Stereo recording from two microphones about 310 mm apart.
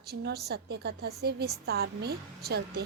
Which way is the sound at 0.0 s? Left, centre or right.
Right.